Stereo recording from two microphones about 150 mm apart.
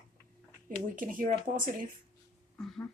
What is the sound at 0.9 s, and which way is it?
Speech, 60° right (ahead or behind).